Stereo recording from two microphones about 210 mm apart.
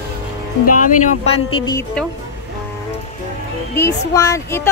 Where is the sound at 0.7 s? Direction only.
40° left (ahead or behind); by 1.8 s 25° left (ahead or behind).